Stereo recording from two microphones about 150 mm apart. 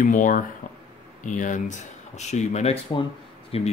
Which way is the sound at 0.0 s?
60° left (ahead or behind).